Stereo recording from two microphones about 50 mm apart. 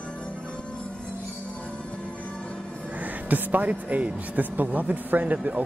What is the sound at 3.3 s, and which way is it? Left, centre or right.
Speech, right.